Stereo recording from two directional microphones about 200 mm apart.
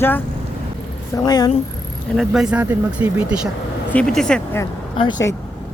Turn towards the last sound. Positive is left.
turn(degrees=20)  # may be behind; listen again after turning